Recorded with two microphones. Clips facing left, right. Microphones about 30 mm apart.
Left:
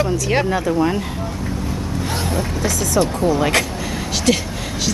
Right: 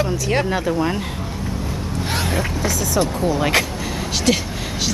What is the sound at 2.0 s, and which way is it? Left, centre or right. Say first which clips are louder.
Speech: right 1 dB; right.